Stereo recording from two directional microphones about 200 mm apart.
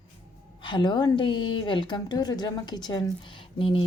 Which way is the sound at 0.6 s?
25° left (ahead or behind).